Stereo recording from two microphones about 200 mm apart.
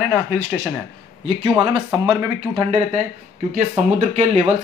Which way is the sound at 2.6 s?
30° right (ahead or behind).